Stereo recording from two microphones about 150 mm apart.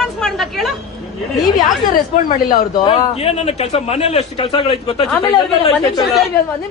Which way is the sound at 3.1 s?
45° left (ahead or behind).